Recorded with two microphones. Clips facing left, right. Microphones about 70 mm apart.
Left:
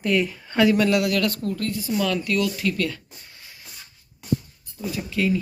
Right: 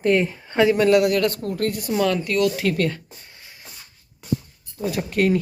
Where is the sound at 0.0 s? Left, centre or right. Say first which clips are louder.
Right 3 dB; right.